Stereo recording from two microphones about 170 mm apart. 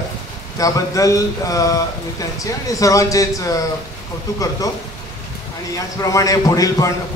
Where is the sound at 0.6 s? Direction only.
20° left (ahead or behind).